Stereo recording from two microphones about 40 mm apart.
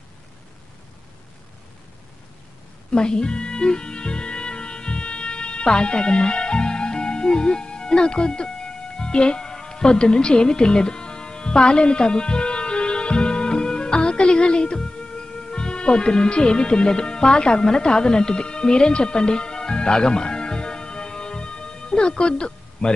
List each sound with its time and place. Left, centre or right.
2.9 s music: left